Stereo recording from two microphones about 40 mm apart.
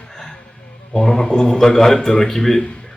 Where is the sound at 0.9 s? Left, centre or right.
Left.